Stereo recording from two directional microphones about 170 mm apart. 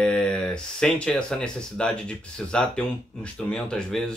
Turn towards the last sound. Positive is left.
turn(degrees=5)  # may be behind; listen again after turning